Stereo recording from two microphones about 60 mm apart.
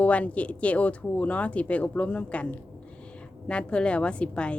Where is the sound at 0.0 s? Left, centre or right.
Left.